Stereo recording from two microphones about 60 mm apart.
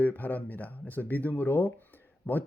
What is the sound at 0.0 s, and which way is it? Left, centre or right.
Speech, left.